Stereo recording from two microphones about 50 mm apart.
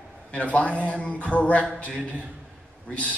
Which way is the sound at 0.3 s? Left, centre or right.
Left.